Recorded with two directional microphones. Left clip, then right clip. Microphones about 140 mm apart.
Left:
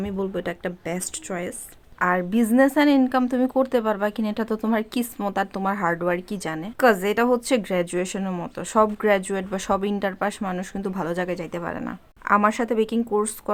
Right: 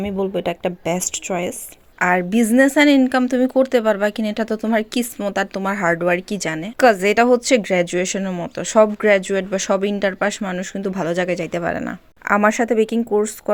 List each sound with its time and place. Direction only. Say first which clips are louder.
0.0 s a woman's voice: right 6 dB; 15° right (ahead or behind)